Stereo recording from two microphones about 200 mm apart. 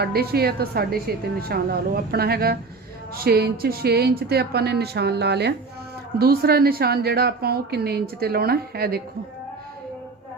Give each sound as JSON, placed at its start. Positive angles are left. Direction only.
{"t": 0.0, "sound": "a woman's voice", "side_deg": -50}